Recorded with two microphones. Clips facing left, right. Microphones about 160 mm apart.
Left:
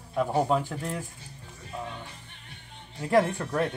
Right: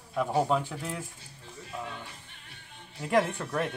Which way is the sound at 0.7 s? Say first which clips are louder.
Left 3 dB; 5° right (ahead or behind).